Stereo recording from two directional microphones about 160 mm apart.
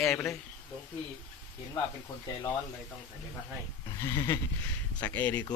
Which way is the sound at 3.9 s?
15° left (ahead or behind).